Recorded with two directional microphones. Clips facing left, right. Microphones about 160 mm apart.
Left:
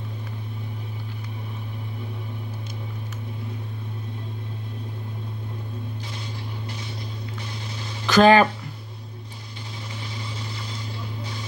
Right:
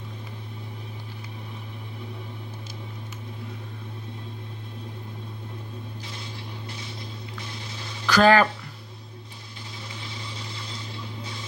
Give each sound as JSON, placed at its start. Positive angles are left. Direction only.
{"t": 8.1, "sound": "speech", "side_deg": 20}